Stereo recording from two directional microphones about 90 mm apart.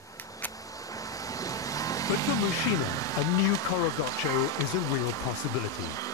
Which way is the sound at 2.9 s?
40° left (ahead or behind).